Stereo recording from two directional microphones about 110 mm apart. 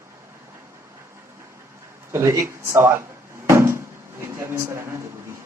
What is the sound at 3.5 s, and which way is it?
Cupboard open or close, 25° right (ahead or behind).